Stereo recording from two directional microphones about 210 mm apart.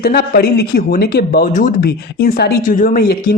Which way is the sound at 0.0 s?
45° left (ahead or behind).